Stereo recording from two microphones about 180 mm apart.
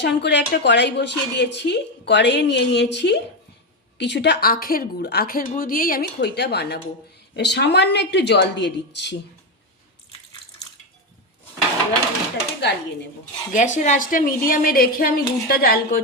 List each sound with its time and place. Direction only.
0.0 s a woman's voice: 70° left (ahead or behind)
12.5 s a woman's voice: 70° left (ahead or behind)
13.5 s a woman's voice: 40° left (ahead or behind)